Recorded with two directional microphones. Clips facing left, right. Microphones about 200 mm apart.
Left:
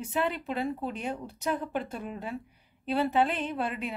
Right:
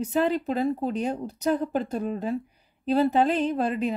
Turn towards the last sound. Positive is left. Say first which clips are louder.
# right 7 dB
turn(degrees=-40)  # may be behind; listen again after turning